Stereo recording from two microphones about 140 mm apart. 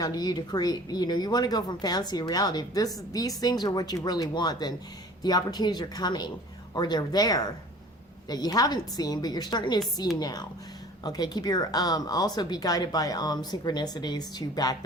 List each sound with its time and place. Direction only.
0.0 s speech: 30° left (ahead or behind)